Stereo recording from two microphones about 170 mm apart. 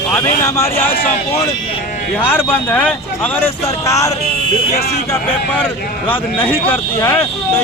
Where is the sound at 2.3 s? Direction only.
10° left (ahead or behind).